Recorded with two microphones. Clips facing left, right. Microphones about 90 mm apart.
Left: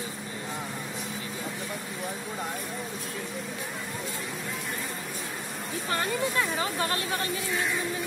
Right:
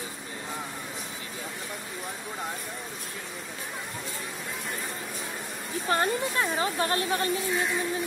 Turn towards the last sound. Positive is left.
turn(degrees=-30)  # may be behind; listen again after turning